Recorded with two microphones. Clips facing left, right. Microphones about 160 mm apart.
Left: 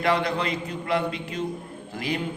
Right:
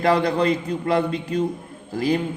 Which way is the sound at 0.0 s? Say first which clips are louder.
Right 5 dB; 40° right (ahead or behind).